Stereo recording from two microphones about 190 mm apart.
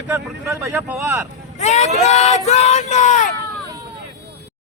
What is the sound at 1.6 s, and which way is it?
Speech, 35° left (ahead or behind).